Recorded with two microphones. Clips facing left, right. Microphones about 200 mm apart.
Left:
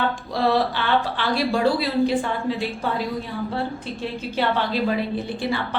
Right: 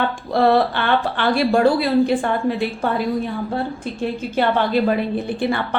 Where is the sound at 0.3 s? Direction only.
55° right (ahead or behind).